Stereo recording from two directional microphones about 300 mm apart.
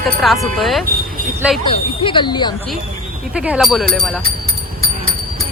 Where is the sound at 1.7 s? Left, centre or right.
Centre.